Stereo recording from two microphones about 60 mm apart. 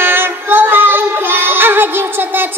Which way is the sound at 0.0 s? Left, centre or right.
Right.